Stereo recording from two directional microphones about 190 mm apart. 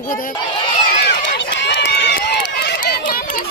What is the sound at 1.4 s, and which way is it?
Run, 65° left (ahead or behind).